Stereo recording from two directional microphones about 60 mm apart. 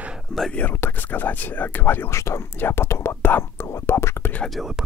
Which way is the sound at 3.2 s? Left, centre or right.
Left.